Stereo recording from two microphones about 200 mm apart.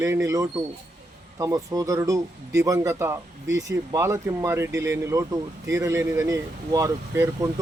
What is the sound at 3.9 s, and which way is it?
Speech, 15° right (ahead or behind).